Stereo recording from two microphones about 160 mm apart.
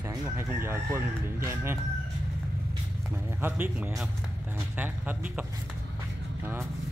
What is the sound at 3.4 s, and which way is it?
Speech, 10° right (ahead or behind).